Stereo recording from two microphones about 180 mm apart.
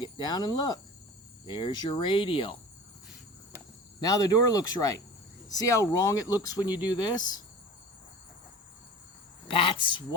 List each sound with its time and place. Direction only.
0.0 s speech: 25° left (ahead or behind)
4.0 s speech: 20° left (ahead or behind)
9.5 s speech: 30° left (ahead or behind)